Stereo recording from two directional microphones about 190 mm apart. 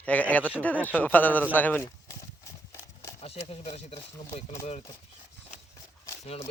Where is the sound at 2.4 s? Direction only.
15° left (ahead or behind).